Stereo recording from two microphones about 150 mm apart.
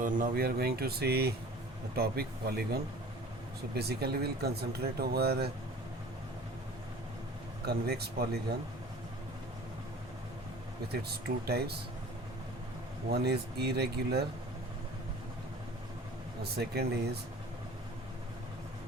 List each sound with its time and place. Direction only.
0.0 s speech: 60° right (ahead or behind); by 5.5 s 90° right
7.6 s speech: 90° right
11.1 s speech: 90° right
13.1 s speech: 90° right
16.4 s speech: 90° right